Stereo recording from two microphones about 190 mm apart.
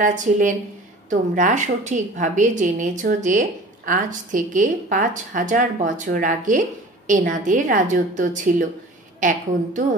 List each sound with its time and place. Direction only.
0.0 s a woman's voice: 45° right (ahead or behind)